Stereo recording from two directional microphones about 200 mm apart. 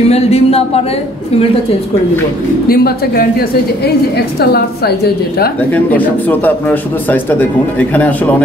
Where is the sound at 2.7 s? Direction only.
50° left (ahead or behind).